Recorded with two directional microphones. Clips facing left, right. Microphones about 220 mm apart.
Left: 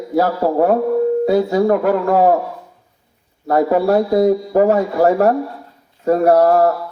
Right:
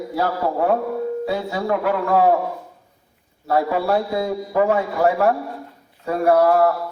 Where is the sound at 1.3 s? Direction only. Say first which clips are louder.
Left 8 dB; 40° left (ahead or behind).